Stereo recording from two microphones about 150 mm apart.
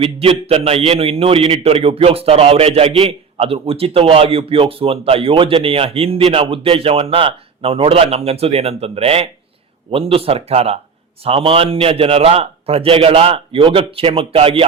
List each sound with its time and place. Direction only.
0.0 s a man's voice: 40° right (ahead or behind)